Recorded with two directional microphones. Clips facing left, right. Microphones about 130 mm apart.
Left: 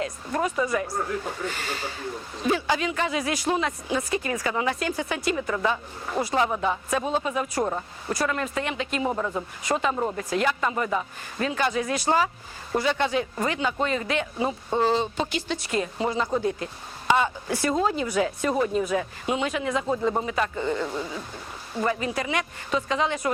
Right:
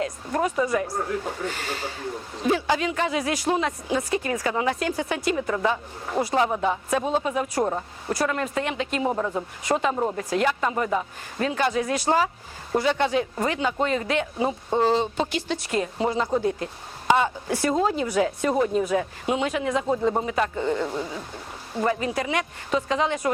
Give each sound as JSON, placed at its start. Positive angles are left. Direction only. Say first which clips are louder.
{"t": 0.3, "sound": "speech", "louder": "right 2 dB", "side_deg": -30}
{"t": 5.5, "sound": "a woman's voice", "louder": "right 1 dB", "side_deg": -25}
{"t": 9.0, "sound": "a woman's voice", "louder": "right 2 dB", "side_deg": -25}
{"t": 10.3, "sound": "speech", "louder": "right 1 dB", "side_deg": -40}
{"t": 10.7, "sound": "a woman's voice", "louder": "right 2 dB", "side_deg": -25}
{"t": 14.3, "sound": "a woman's voice", "louder": "right 1 dB", "side_deg": -25}
{"t": 15.3, "sound": "speech", "louder": "right 1 dB", "side_deg": -40}
{"t": 16.0, "sound": "a woman's voice", "louder": "right 2 dB", "side_deg": -25}